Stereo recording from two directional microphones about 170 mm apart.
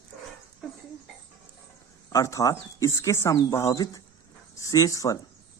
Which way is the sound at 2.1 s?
20° left (ahead or behind).